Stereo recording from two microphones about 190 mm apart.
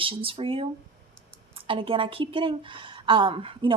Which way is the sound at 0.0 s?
30° right (ahead or behind).